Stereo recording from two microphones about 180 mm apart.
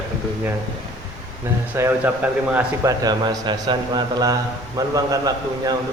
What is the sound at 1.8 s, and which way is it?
Speech, 15° right (ahead or behind).